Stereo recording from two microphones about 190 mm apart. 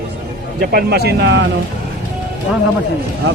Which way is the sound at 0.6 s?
55° right (ahead or behind).